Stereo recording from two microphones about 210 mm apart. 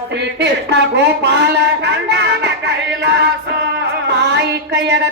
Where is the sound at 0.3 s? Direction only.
55° right (ahead or behind).